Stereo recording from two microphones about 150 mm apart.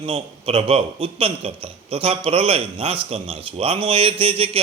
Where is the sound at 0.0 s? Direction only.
40° right (ahead or behind).